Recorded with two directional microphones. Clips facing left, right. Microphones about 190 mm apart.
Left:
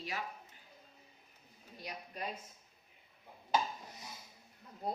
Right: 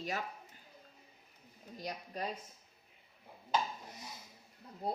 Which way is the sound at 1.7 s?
40° right (ahead or behind).